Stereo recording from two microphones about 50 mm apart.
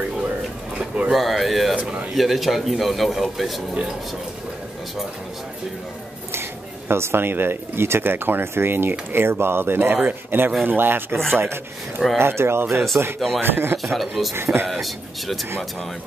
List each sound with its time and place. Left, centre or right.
0.7 s a sound: right
1.1 s a man's voice: centre
1.8 s speech: right
2.1 s a man's voice: centre
6.9 s speech: right
12.9 s speech: right
13.9 s a man's voice: centre
14.3 s speech: right
14.7 s a man's voice: centre